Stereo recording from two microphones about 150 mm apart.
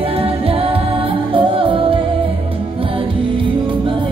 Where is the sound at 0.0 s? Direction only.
40° right (ahead or behind).